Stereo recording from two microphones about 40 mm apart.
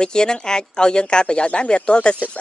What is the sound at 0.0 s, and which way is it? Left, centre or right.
Speech, centre.